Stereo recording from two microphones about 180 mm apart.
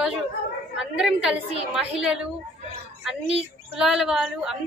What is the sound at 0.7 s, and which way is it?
A woman's voice, 5° right (ahead or behind).